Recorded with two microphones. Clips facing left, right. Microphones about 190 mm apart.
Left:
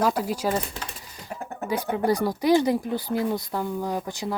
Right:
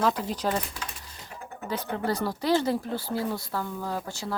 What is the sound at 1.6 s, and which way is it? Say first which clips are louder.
Speech: left 5 dB; 10° left (ahead or behind).